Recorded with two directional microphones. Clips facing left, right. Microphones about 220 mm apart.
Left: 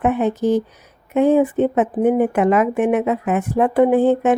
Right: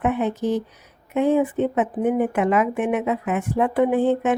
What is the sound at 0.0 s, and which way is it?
Speech, 40° left (ahead or behind).